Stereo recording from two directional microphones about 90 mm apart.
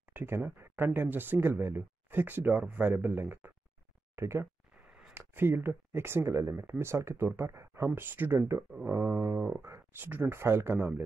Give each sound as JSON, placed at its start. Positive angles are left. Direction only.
{"t": 0.1, "sound": "speech", "side_deg": -25}